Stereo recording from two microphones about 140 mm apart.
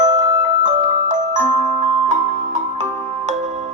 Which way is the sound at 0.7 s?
40° right (ahead or behind).